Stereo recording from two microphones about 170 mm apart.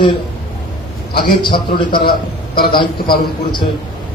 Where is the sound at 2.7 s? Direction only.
30° left (ahead or behind).